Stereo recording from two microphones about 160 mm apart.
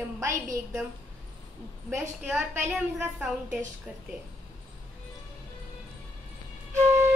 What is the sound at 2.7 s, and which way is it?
Speech, 5° right (ahead or behind).